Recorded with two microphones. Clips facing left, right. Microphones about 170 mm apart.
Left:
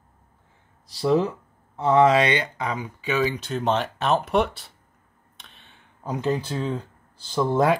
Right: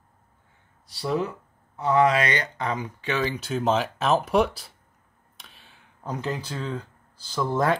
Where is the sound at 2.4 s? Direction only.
5° left (ahead or behind).